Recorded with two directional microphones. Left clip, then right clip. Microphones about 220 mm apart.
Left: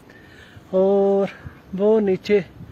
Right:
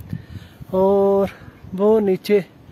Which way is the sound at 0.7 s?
25° right (ahead or behind).